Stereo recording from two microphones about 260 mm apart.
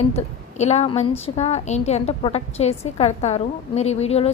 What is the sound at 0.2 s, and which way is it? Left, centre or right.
A woman's voice, left.